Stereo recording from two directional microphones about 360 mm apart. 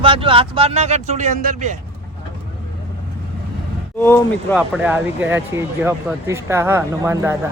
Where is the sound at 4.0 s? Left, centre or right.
Centre.